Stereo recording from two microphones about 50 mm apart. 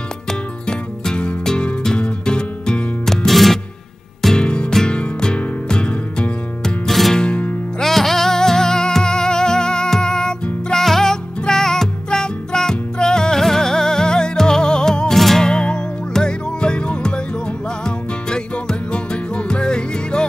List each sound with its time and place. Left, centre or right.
0.3 s music: centre
3.1 s music: centre
4.4 s music: centre
6.6 s music: centre
7.2 s music: left
7.8 s music: centre
15.4 s music: centre